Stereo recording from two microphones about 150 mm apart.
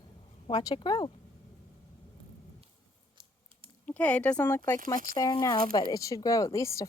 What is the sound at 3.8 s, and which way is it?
Speech, 10° left (ahead or behind).